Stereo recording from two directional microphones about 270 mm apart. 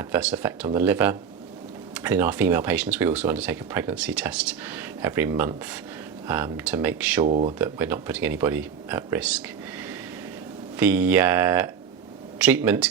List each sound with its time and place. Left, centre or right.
0.0 s speech: centre
7.3 s speech: right
7.6 s speech: centre
10.8 s speech: centre